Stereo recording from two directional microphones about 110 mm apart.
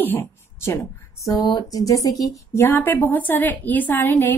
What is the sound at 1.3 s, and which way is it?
A woman's voice, 35° left (ahead or behind).